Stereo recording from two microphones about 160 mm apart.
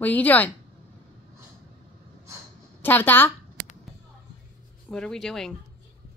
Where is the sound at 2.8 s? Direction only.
10° left (ahead or behind).